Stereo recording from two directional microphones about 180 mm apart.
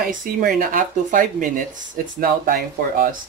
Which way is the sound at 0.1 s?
50° right (ahead or behind).